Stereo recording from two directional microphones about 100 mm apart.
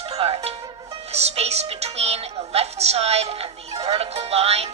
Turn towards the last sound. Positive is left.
turn(degrees=-90)